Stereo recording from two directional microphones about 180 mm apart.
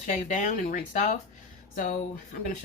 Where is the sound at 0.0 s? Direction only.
45° left (ahead or behind).